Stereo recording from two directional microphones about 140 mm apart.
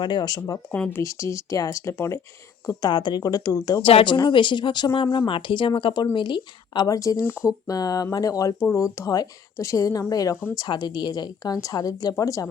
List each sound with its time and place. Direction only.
0.0 s speech: 30° left (ahead or behind)
0.7 s speech: 10° left (ahead or behind)
2.8 s speech: 35° left (ahead or behind)
3.8 s speech: 35° left (ahead or behind)